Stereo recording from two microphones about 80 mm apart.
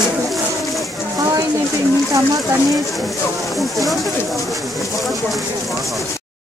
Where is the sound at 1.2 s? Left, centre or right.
Right.